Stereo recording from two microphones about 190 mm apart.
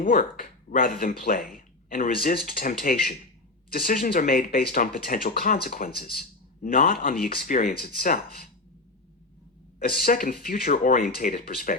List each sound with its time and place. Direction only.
0.0 s speech: 50° left (ahead or behind)
9.8 s speech: 55° left (ahead or behind)